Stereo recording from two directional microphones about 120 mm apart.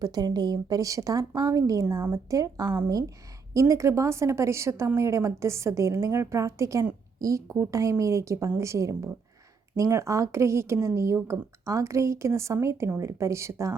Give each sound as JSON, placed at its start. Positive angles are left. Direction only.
{"t": 0.0, "sound": "a woman's voice", "side_deg": -35}